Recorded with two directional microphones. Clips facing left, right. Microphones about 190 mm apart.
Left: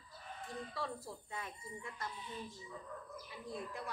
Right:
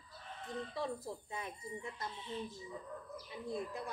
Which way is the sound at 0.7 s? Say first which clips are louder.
Right 4 dB; 20° right (ahead or behind).